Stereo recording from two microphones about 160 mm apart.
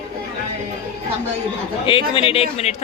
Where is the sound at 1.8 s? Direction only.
35° left (ahead or behind).